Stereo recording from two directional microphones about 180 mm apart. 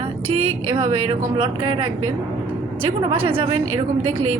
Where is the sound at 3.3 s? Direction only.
30° right (ahead or behind).